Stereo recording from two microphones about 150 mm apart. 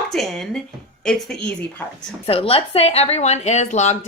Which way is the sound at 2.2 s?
40° left (ahead or behind).